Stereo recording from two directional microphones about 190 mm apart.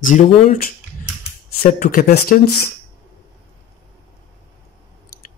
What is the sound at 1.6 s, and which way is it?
Speech, 50° left (ahead or behind).